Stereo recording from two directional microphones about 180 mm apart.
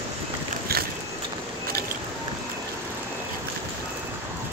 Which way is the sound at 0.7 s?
60° right (ahead or behind).